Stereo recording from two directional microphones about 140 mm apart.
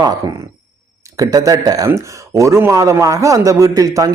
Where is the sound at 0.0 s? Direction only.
30° right (ahead or behind).